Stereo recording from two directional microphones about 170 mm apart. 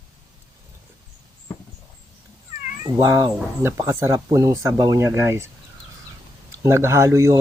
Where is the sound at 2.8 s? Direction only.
20° right (ahead or behind).